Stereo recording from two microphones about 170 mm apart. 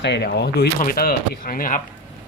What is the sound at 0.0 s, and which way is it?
Speech, 85° left.